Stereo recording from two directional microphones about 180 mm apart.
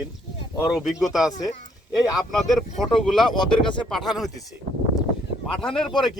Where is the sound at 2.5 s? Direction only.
Centre (ahead or behind).